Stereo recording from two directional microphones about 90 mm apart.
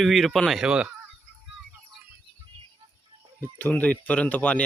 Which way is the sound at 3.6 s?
20° left (ahead or behind).